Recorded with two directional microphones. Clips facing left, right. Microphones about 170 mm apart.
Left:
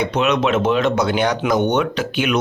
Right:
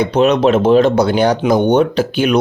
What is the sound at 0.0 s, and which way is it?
Speech, 30° right (ahead or behind).